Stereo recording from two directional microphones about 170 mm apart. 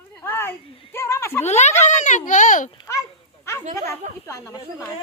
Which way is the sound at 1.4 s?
40° left (ahead or behind).